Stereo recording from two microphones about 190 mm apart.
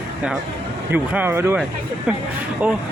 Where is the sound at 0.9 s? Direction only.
10° right (ahead or behind).